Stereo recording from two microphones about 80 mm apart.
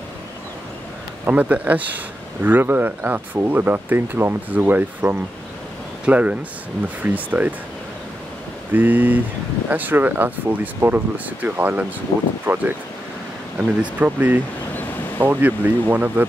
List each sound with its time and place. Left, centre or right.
1.2 s speech: centre
8.7 s speech: right